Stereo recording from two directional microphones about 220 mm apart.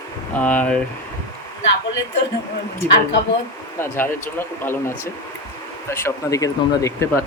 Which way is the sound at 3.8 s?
10° left (ahead or behind).